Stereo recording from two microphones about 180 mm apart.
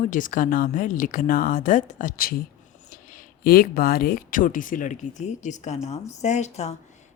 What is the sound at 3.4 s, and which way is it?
Speech, 55° left (ahead or behind).